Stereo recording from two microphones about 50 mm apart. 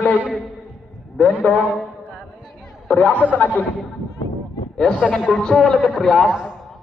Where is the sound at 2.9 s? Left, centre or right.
Left.